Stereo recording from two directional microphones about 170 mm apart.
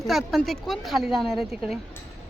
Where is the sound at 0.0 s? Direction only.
Centre (ahead or behind).